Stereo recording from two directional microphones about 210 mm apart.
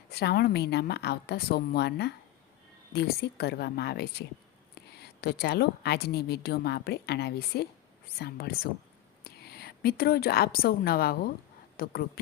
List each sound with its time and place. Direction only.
0.1 s a woman's voice: 50° left (ahead or behind)